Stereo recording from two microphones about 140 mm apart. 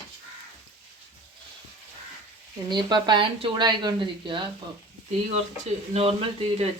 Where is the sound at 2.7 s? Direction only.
30° right (ahead or behind).